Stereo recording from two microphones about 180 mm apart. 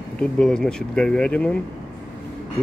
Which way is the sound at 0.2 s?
5° left (ahead or behind).